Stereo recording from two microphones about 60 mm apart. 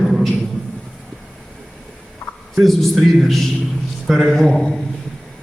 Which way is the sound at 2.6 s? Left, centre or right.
Centre.